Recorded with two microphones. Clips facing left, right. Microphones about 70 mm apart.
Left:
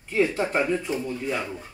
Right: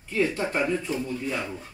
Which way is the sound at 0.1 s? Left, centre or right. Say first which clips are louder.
Left 2 dB; left.